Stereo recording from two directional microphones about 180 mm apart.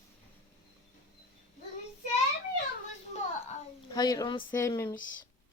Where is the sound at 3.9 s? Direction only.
20° left (ahead or behind).